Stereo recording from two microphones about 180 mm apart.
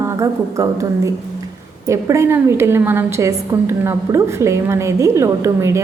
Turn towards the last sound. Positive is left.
turn(degrees=-15)  # may be behind; listen again after turning